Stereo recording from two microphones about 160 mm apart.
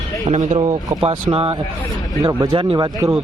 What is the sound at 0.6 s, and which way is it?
Speech, 25° right (ahead or behind).